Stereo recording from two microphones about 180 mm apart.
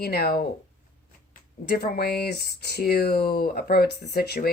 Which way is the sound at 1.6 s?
60° left (ahead or behind).